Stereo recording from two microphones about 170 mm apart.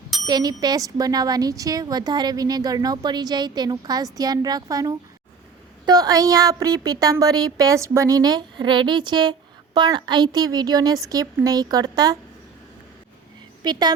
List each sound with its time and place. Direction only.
0.3 s speech: 25° right (ahead or behind)
13.7 s speech: 25° right (ahead or behind)